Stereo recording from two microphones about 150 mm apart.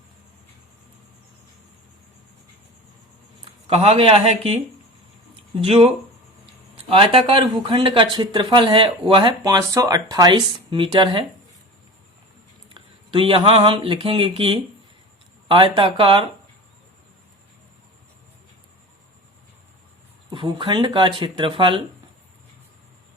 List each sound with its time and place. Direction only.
3.7 s speech: 45° right (ahead or behind)
12.6 s speech: 35° right (ahead or behind)
20.3 s speech: 35° right (ahead or behind)